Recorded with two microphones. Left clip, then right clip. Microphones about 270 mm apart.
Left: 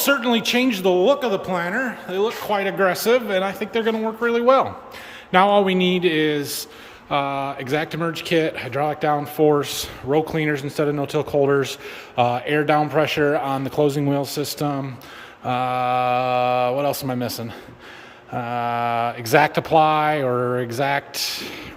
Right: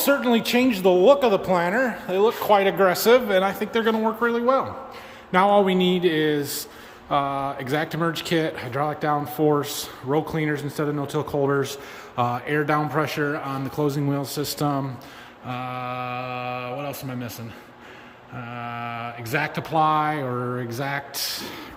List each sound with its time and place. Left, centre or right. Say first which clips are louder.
0.0 s speech: left 1 dB; centre
15.4 s speech: left 9 dB; centre